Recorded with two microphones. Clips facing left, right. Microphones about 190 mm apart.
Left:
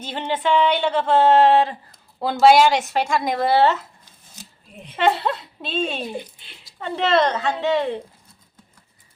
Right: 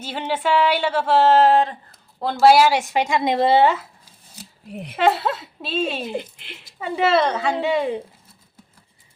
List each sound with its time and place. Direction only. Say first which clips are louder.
0.0 s a woman's voice: even; 5° right (ahead or behind); by 3.6 s 25° right (ahead or behind)
3.6 s a sound: even; 10° right (ahead or behind)
4.7 s speech: right 9 dB; 75° right (ahead or behind)
4.9 s a woman's voice: right 1 dB; centre (ahead or behind)